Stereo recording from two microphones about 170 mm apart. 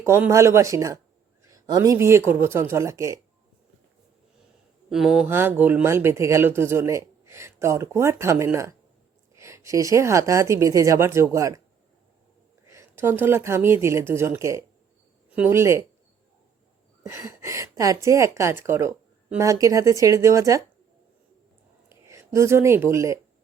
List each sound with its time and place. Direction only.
0.0 s a woman's voice: 15° right (ahead or behind)
4.9 s a woman's voice: 5° right (ahead or behind); by 11.6 s 20° right (ahead or behind)
12.6 s a woman's voice: 15° right (ahead or behind)
17.0 s a woman's voice: 15° right (ahead or behind)
21.8 s speech: 15° right (ahead or behind)